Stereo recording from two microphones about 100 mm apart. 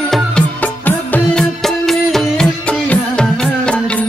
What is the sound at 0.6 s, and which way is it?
Music, 15° left (ahead or behind).